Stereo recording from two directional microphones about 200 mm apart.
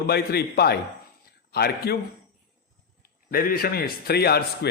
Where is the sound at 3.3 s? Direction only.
45° left (ahead or behind).